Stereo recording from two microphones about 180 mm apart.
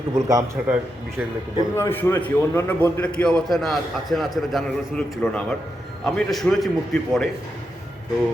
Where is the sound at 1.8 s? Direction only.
15° left (ahead or behind).